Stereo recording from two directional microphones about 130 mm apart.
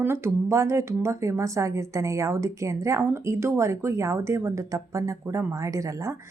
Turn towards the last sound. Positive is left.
turn(degrees=-20)  # may be behind; listen again after turning